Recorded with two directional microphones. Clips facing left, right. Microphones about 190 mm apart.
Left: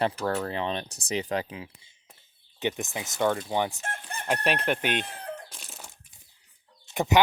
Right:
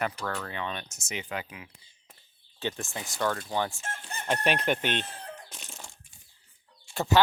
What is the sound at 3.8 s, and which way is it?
Chicken, 55° left (ahead or behind).